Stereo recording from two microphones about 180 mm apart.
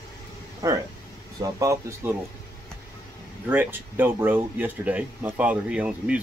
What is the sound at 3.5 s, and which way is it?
Speech, 10° right (ahead or behind).